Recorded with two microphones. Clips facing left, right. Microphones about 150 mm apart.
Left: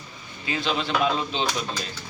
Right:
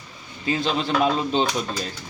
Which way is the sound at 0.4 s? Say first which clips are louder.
Right 3 dB; 40° right (ahead or behind).